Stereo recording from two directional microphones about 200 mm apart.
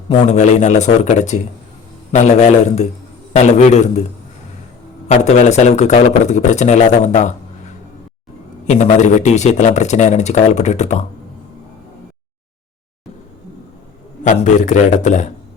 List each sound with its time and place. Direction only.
0.3 s speech: 35° left (ahead or behind)
5.0 s speech: 35° left (ahead or behind)
8.6 s speech: 35° left (ahead or behind)
14.3 s speech: 35° left (ahead or behind)